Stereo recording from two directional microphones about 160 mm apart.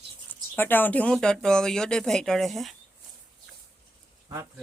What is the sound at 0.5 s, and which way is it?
Speech, 10° left (ahead or behind).